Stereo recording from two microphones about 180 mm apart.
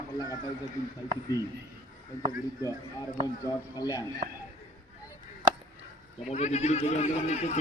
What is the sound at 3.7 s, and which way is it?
Speech, 20° left (ahead or behind).